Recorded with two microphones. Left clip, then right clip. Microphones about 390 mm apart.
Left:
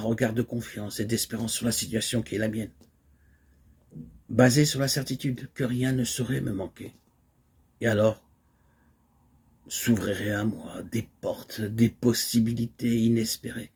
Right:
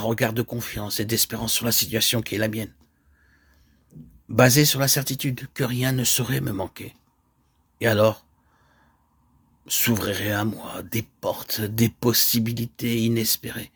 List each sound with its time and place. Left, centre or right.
0.0 s speech: right
4.4 s speech: right
9.6 s speech: right